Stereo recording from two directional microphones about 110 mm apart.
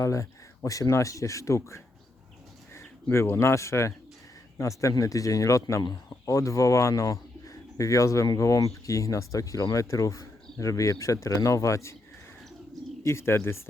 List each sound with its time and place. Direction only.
0.0 s speech: 30° left (ahead or behind)
12.7 s bird: centre (ahead or behind)
13.1 s speech: 25° left (ahead or behind)